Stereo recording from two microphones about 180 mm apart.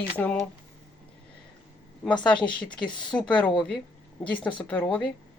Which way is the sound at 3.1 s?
5° left (ahead or behind).